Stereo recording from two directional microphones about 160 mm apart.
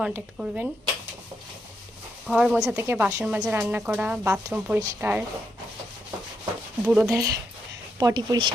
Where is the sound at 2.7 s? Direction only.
15° right (ahead or behind).